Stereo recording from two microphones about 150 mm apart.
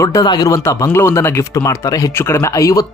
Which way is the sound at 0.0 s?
25° left (ahead or behind).